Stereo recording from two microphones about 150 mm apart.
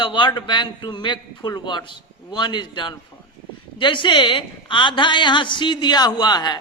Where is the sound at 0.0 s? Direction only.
30° left (ahead or behind).